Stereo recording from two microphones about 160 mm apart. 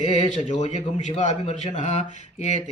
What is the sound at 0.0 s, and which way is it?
Speech, 45° left (ahead or behind).